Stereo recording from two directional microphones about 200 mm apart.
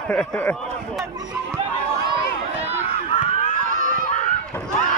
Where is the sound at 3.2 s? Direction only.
40° right (ahead or behind).